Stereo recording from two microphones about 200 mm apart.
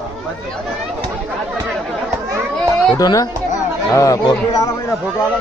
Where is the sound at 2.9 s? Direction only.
20° left (ahead or behind).